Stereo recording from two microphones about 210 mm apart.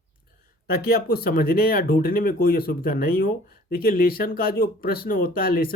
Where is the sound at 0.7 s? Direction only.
45° left (ahead or behind).